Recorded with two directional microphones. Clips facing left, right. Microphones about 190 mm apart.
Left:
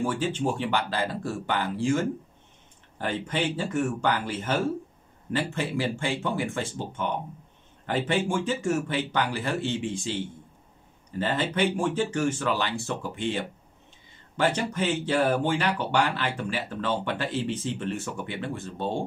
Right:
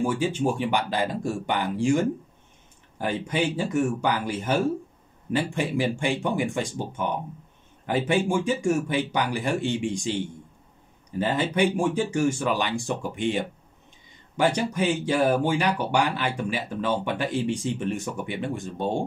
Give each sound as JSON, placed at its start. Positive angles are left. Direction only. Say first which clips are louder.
{"t": 0.0, "sound": "speech", "louder": "right 3 dB", "side_deg": -10}